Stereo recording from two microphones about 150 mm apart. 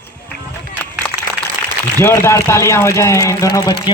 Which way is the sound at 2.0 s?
15° left (ahead or behind).